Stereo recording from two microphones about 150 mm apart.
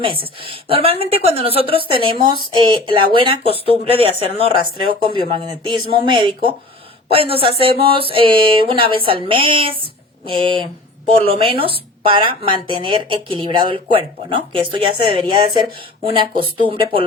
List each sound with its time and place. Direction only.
0.0 s speech: 35° right (ahead or behind)